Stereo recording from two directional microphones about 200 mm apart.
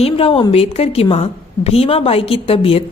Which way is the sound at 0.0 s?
30° left (ahead or behind).